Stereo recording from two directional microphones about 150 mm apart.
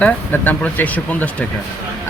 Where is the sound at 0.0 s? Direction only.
10° left (ahead or behind).